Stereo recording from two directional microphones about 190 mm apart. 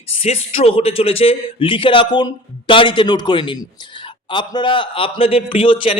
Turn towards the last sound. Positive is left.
turn(degrees=25)  # may be behind; listen again after turning